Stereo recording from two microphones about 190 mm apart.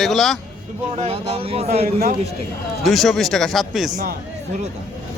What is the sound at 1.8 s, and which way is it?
Speech, 55° right (ahead or behind).